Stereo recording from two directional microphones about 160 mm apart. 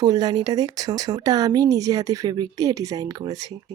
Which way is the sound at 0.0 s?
25° right (ahead or behind).